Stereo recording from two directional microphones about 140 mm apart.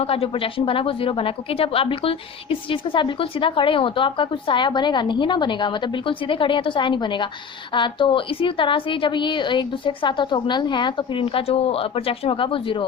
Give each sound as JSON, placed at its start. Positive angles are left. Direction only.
{"t": 0.0, "sound": "a woman's voice", "side_deg": 45}